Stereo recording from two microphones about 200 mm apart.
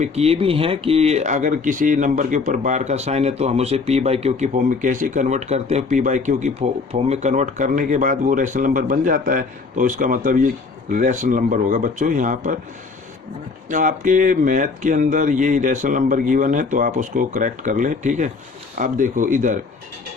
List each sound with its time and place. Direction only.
0.0 s speech: 30° right (ahead or behind)
13.7 s speech: 40° right (ahead or behind)